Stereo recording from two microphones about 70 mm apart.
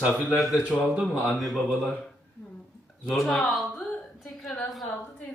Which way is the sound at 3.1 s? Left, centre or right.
Centre.